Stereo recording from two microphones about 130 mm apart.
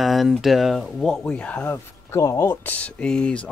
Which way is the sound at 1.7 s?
20° left (ahead or behind).